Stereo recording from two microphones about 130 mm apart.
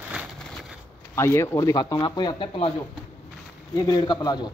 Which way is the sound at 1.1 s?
20° left (ahead or behind).